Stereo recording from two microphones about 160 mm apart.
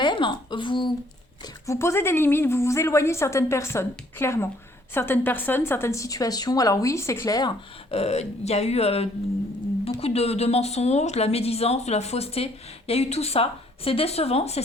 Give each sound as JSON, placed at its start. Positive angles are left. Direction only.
{"t": 0.0, "sound": "speech", "side_deg": 30}
{"t": 1.6, "sound": "a woman's voice", "side_deg": 15}
{"t": 7.9, "sound": "speech", "side_deg": 40}